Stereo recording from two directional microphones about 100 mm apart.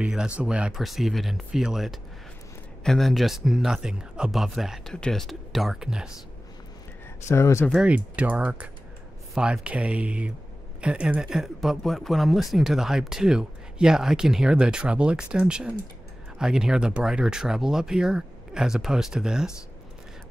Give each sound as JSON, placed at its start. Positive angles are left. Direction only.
{"t": 0.0, "sound": "speech", "side_deg": -10}
{"t": 7.2, "sound": "speech", "side_deg": 25}
{"t": 7.8, "sound": "speech", "side_deg": -15}